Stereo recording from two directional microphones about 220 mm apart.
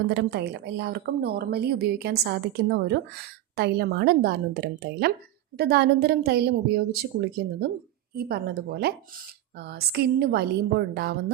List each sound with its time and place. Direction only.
0.1 s a woman's voice: 50° right (ahead or behind)